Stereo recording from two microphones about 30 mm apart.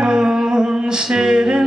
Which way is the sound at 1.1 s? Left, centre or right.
Right.